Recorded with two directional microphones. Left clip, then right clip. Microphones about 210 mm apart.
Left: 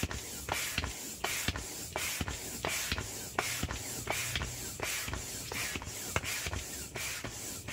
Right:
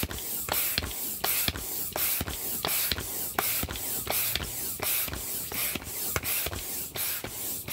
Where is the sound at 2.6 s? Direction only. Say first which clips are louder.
Right 4 dB; 40° right (ahead or behind).